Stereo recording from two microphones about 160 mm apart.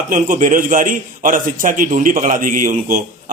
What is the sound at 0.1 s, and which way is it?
A man's voice, 55° right (ahead or behind).